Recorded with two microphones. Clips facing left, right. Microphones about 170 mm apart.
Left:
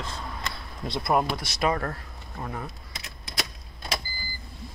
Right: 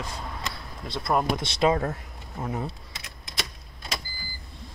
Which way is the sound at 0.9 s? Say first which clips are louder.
Left 1 dB; 10° left (ahead or behind).